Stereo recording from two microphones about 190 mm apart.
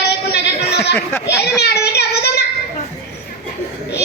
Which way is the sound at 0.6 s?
60° left (ahead or behind).